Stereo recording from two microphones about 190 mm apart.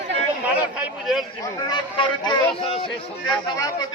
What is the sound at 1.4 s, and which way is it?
A man's voice, 20° left (ahead or behind).